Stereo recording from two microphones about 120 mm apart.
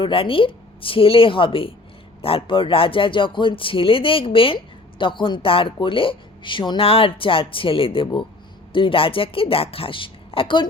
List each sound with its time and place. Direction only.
0.0 s speech: 50° left (ahead or behind)